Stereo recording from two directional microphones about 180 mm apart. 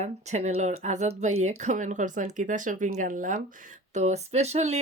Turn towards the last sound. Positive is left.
turn(degrees=-40)  # may be behind; listen again after turning